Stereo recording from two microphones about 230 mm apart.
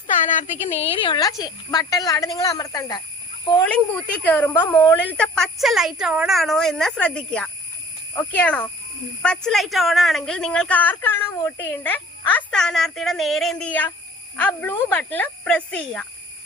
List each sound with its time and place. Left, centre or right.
0.3 s a woman's voice: left
3.7 s a woman's voice: centre
5.1 s a woman's voice: centre